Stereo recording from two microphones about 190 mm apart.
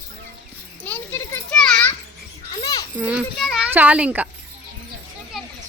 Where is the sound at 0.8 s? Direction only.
10° left (ahead or behind).